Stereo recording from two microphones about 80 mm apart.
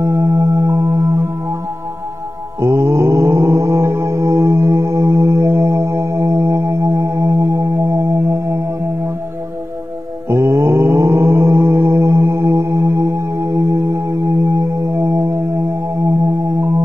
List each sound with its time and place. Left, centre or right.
0.0 s music: right
2.6 s music: right
10.2 s mantra: right
13.7 s music: right